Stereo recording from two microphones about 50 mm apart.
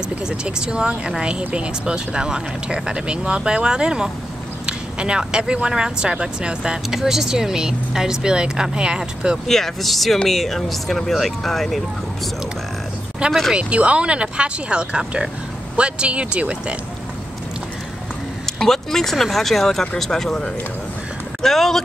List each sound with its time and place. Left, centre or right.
0.3 s speech: centre
9.5 s speech: centre
13.2 s speech: right
18.6 s speech: centre